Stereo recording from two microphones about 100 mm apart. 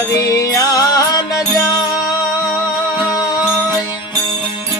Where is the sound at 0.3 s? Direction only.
35° left (ahead or behind).